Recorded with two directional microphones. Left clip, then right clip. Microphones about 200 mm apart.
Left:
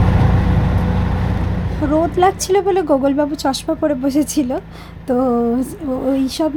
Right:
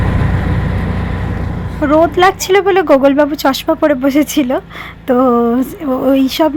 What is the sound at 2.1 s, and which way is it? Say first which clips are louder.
Speech: right 4 dB; 10° right (ahead or behind).